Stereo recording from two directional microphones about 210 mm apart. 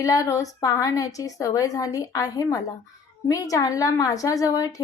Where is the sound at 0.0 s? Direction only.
15° left (ahead or behind).